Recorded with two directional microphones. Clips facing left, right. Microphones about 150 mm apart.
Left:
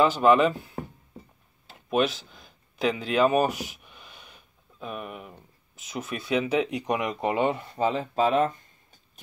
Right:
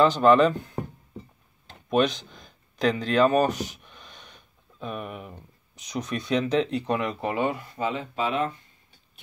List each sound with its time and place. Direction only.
0.0 s speech: 10° left (ahead or behind)
7.7 s speech: 35° left (ahead or behind)